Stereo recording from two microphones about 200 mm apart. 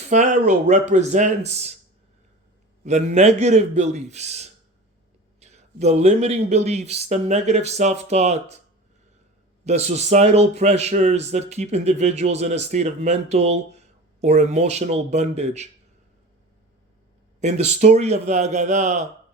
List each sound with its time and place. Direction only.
0.1 s speech: 35° right (ahead or behind)
2.8 s speech: 35° right (ahead or behind)
9.6 s speech: 35° right (ahead or behind)
17.4 s speech: 35° right (ahead or behind)